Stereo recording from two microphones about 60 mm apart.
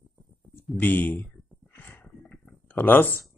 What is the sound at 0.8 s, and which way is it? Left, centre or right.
Speech, left.